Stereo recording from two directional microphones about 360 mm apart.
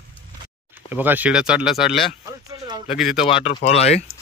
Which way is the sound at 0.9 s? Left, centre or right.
Centre.